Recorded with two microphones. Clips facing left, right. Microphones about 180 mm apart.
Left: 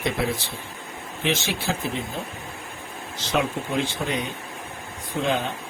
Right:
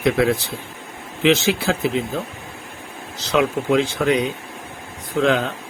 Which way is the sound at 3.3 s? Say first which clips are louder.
Right 7 dB; 90° right.